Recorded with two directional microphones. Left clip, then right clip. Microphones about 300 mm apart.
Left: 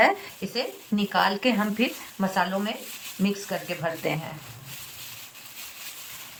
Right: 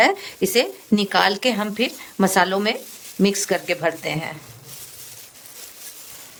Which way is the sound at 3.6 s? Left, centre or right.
Right.